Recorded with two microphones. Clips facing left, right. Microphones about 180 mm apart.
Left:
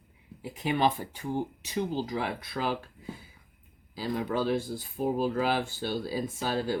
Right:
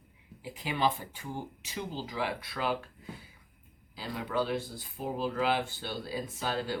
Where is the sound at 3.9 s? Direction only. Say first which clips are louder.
Left 3 dB; 45° left (ahead or behind).